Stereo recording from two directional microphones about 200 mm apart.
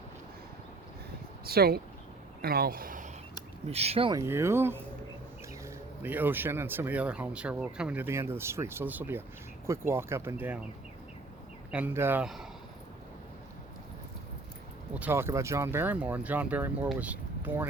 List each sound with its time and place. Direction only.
1.5 s speech: 50° right (ahead or behind)
3.7 s speech: 30° right (ahead or behind)
4.2 s speech: 15° right (ahead or behind)
11.7 s speech: 10° right (ahead or behind)
14.9 s speech: 10° right (ahead or behind)